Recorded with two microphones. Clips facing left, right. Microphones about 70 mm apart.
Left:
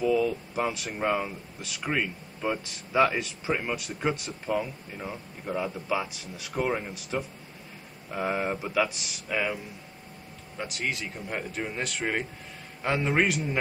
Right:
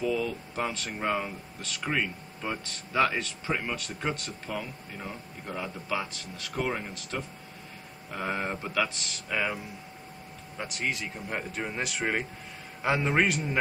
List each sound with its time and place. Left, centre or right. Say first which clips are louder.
0.0 s speech: left 4 dB; centre
10.6 s speech: even; centre